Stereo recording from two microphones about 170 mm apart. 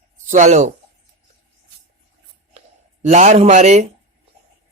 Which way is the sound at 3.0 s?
45° right (ahead or behind).